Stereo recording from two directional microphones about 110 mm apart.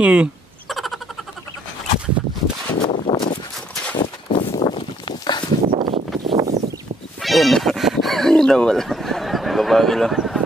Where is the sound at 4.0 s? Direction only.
55° left (ahead or behind).